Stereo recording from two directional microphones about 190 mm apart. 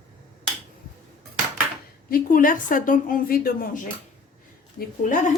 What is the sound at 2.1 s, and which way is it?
A woman's voice, 45° left (ahead or behind).